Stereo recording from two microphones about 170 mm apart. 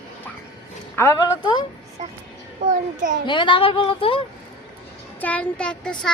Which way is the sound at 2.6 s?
50° right (ahead or behind).